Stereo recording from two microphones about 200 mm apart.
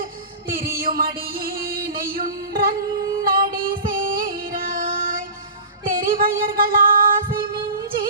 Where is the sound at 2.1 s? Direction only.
45° right (ahead or behind).